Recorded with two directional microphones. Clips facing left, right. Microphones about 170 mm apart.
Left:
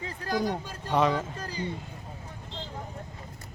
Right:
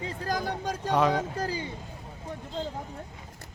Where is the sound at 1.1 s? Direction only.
75° right (ahead or behind).